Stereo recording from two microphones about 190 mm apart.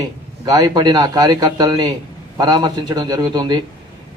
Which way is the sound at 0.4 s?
20° right (ahead or behind).